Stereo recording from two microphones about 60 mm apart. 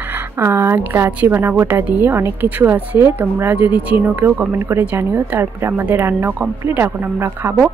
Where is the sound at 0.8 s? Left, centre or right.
Right.